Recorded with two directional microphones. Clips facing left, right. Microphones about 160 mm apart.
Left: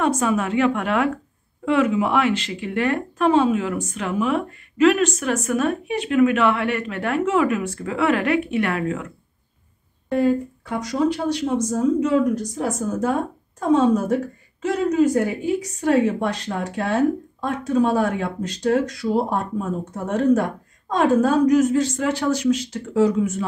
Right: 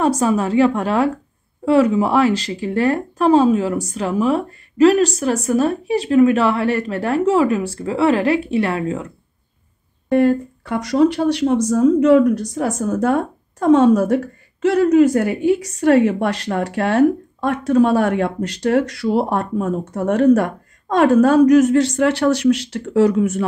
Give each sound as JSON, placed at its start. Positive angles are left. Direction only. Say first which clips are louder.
{"t": 0.0, "sound": "speech", "louder": "right 4 dB", "side_deg": -35}
{"t": 10.1, "sound": "speech", "louder": "right 4 dB", "side_deg": -75}